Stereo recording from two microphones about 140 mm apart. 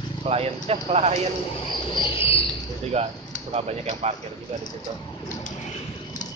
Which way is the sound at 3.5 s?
50° right (ahead or behind).